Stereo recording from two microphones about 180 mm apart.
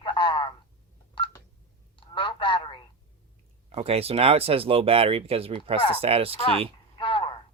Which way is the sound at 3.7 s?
35° right (ahead or behind).